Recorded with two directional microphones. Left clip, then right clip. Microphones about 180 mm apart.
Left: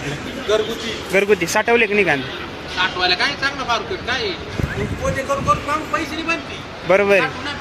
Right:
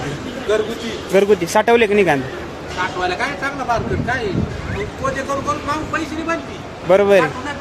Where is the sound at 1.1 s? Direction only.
10° right (ahead or behind).